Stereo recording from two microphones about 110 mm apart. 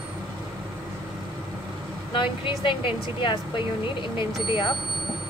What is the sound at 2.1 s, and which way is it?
Speech, 50° left (ahead or behind).